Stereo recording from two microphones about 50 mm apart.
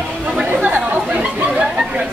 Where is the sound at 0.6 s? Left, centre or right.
Right.